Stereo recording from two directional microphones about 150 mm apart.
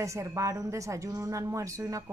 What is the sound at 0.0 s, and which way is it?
A woman's voice, 20° right (ahead or behind).